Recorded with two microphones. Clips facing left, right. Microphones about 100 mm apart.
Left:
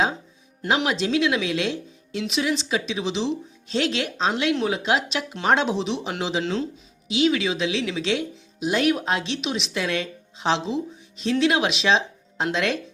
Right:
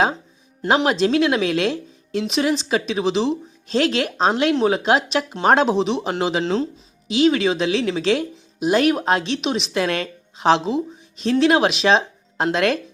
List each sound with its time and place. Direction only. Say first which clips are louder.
0.9 s speech: right 5 dB; 45° right (ahead or behind)
6.4 s speech: right 5 dB; 35° right (ahead or behind)